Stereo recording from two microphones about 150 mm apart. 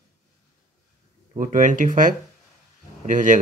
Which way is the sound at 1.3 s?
60° right (ahead or behind).